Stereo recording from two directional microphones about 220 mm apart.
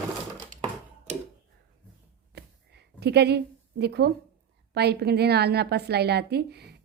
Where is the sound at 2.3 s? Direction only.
50° right (ahead or behind).